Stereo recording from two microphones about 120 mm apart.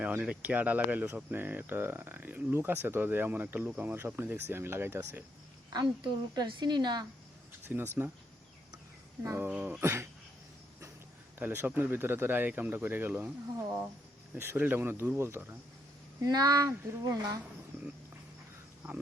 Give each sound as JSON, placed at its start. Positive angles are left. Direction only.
{"t": 0.0, "sound": "speech", "side_deg": -10}
{"t": 5.7, "sound": "a woman's voice", "side_deg": -35}
{"t": 7.7, "sound": "speech", "side_deg": -10}
{"t": 9.2, "sound": "speech", "side_deg": -20}
{"t": 11.3, "sound": "speech", "side_deg": -15}
{"t": 14.3, "sound": "speech", "side_deg": -20}
{"t": 16.2, "sound": "a woman's voice", "side_deg": -35}